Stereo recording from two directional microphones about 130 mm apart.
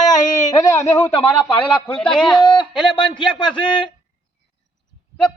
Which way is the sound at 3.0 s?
35° left (ahead or behind).